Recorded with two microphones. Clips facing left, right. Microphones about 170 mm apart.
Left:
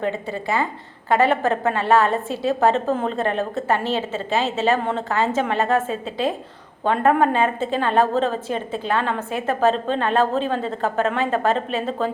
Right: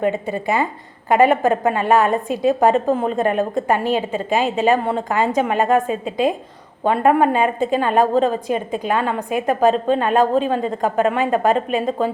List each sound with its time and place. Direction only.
0.0 s a woman's voice: 20° right (ahead or behind)